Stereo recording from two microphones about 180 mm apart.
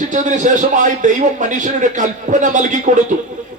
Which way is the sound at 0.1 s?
45° right (ahead or behind).